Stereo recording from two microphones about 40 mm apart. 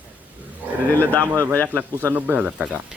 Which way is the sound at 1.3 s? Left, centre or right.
Right.